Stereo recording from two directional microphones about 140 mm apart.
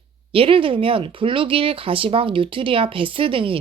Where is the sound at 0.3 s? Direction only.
40° right (ahead or behind).